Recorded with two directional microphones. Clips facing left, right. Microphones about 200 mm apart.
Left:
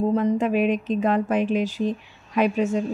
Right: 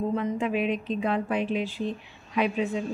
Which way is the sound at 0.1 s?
40° left (ahead or behind).